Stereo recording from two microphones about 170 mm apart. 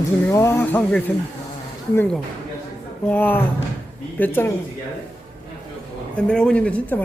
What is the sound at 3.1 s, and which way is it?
Speech, 10° left (ahead or behind).